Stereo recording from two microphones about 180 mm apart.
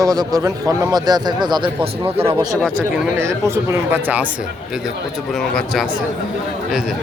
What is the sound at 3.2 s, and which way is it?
Speech, 15° right (ahead or behind).